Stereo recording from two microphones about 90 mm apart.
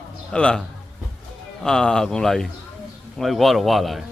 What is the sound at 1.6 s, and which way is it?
Speech, 5° left (ahead or behind).